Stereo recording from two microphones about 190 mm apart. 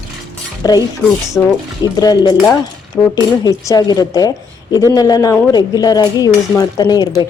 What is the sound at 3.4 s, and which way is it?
Speech, 20° left (ahead or behind).